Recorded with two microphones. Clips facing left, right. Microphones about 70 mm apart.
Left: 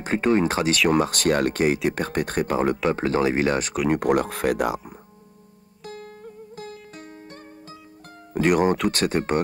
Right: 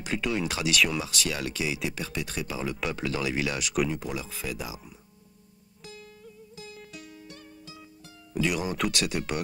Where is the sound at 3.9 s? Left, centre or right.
Left.